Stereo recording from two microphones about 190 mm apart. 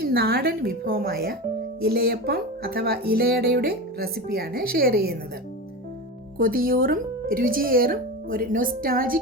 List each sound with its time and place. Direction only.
0.0 s speech: 55° right (ahead or behind)
6.4 s speech: 50° right (ahead or behind)